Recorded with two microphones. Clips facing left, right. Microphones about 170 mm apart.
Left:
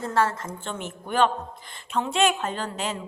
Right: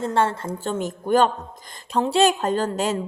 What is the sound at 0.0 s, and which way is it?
Speech, 25° right (ahead or behind).